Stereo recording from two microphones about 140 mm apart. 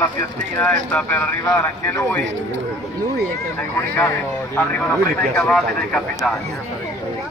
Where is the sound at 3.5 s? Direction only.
15° left (ahead or behind).